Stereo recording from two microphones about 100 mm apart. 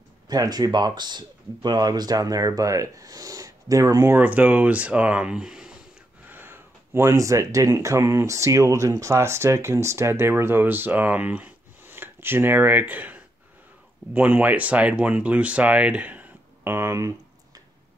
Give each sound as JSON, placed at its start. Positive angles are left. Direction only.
{"t": 0.3, "sound": "speech", "side_deg": -40}
{"t": 4.1, "sound": "speech", "side_deg": -15}
{"t": 6.2, "sound": "speech", "side_deg": -20}